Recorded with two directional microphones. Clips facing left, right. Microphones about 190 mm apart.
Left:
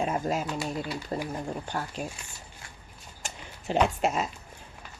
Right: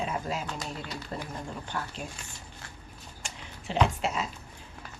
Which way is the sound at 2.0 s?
40° left (ahead or behind).